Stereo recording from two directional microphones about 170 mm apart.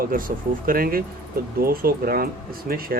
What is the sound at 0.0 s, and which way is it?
Speech, 55° right (ahead or behind).